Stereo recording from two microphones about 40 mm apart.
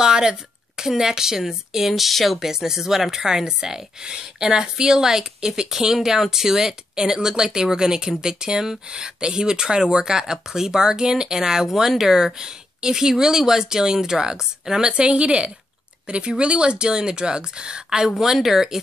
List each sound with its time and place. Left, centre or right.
0.0 s a woman's voice: centre
2.4 s speech: centre